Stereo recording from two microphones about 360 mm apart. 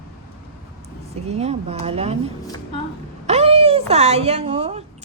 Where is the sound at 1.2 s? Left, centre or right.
Centre.